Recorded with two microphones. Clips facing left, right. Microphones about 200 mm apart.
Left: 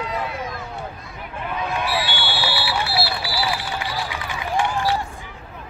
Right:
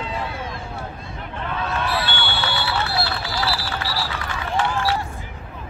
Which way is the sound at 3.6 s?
20° left (ahead or behind).